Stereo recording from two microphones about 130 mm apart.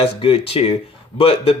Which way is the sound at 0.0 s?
45° left (ahead or behind).